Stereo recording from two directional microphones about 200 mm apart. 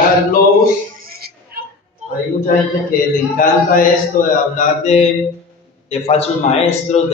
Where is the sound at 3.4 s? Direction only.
40° left (ahead or behind).